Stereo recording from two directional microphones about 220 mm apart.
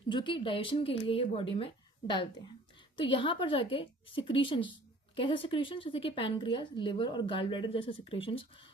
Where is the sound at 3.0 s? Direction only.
20° left (ahead or behind).